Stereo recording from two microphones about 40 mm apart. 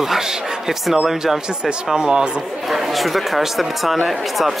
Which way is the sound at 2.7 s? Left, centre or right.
Centre.